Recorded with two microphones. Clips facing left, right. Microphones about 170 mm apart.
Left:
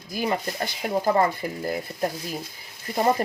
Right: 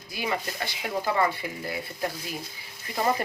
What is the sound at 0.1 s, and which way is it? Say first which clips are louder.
Speech: left 4 dB; 40° left (ahead or behind).